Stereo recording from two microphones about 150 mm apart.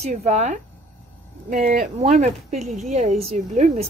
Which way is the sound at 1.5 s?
60° right (ahead or behind).